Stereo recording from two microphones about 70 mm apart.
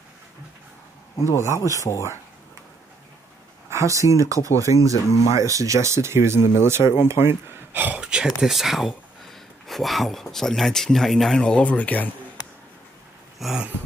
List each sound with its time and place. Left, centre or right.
1.1 s speech: left
3.7 s speech: right
7.7 s speech: right
8.0 s speech: centre
11.4 s speech: centre
13.4 s a sound: centre